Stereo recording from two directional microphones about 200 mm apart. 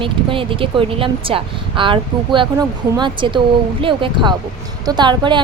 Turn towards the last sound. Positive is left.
turn(degrees=-20)  # may be behind; listen again after turning